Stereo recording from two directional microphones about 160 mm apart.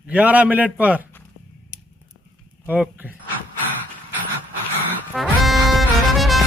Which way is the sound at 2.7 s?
10° right (ahead or behind).